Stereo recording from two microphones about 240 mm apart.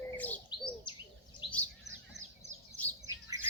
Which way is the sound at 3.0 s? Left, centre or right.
Centre.